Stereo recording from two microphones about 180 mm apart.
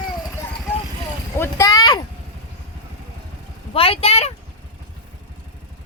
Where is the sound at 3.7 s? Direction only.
30° left (ahead or behind).